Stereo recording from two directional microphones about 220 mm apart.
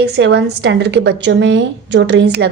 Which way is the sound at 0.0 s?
50° right (ahead or behind).